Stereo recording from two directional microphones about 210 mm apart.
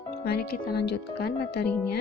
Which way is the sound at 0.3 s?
50° left (ahead or behind).